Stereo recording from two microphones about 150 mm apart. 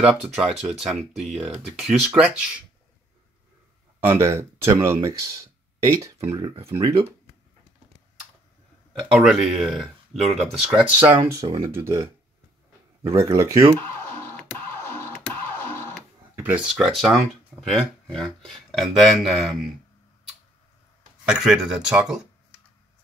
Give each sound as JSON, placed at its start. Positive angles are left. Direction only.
{"t": 0.0, "sound": "speech", "side_deg": -5}
{"t": 4.0, "sound": "speech", "side_deg": -15}
{"t": 6.3, "sound": "speech", "side_deg": -40}
{"t": 9.1, "sound": "speech", "side_deg": 0}
{"t": 11.4, "sound": "speech", "side_deg": -35}
{"t": 13.3, "sound": "speech", "side_deg": -20}
{"t": 14.3, "sound": "scratch", "side_deg": 15}
{"t": 15.4, "sound": "music", "side_deg": 15}
{"t": 16.3, "sound": "speech", "side_deg": -10}
{"t": 21.3, "sound": "speech", "side_deg": -5}